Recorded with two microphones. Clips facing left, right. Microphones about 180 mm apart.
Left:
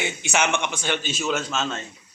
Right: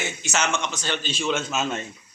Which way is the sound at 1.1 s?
5° left (ahead or behind).